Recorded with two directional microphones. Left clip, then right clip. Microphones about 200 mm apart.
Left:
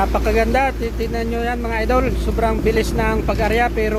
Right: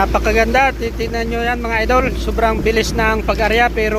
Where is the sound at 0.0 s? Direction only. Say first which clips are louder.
Right 3 dB; centre (ahead or behind).